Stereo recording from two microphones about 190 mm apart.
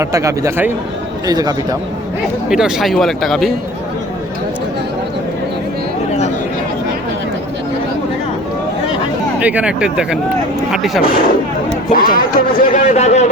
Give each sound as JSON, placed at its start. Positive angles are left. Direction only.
{"t": 0.0, "sound": "a man's voice", "side_deg": -15}
{"t": 2.5, "sound": "speech", "side_deg": -5}
{"t": 9.4, "sound": "speech", "side_deg": -5}
{"t": 11.0, "sound": "speech", "side_deg": 50}